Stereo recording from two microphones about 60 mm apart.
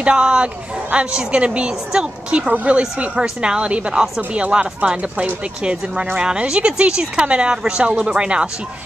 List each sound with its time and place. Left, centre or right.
0.0 s a woman's voice: centre